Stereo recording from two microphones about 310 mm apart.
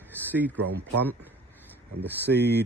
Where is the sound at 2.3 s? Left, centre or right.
Right.